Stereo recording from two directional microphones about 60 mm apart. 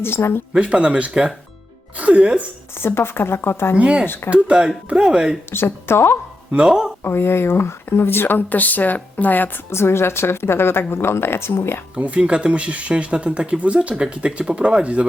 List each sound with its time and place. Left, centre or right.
0.0 s speech: left
0.5 s speech: centre
2.7 s speech: left
3.8 s speech: centre
4.0 s speech: left
4.3 s speech: centre
5.5 s speech: left
6.5 s speech: centre
7.0 s speech: left
9.7 s a woman's voice: left
11.9 s speech: right